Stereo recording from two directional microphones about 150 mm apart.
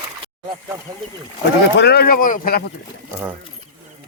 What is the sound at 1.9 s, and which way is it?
Speech, 80° left.